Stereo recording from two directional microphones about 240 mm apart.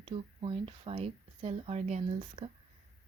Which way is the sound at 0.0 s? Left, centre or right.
Right.